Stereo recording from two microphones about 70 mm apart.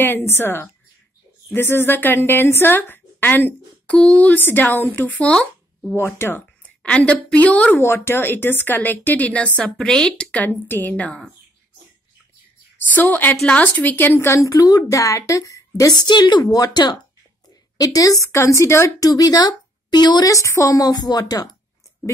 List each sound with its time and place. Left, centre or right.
0.0 s a woman's voice: left
5.9 s a woman's voice: left
6.6 s a woman's voice: centre
7.8 s speech: left
12.7 s a woman's voice: left
14.3 s a woman's voice: left
16.1 s speech: left
17.7 s a woman's voice: left
18.9 s speech: left
20.2 s a woman's voice: left
20.9 s speech: left